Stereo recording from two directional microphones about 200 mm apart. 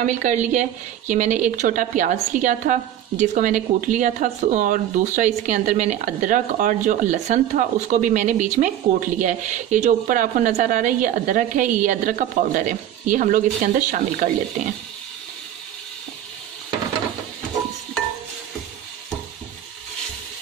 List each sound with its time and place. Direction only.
0.0 s speech: 40° right (ahead or behind)